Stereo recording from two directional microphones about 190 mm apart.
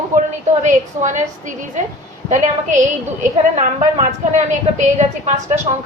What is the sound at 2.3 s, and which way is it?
A woman's voice, 40° right (ahead or behind).